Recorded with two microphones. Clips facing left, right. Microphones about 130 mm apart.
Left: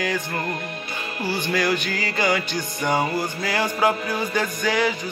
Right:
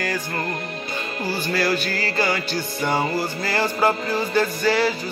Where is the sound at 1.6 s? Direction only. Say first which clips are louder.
Right 1 dB; 15° left (ahead or behind).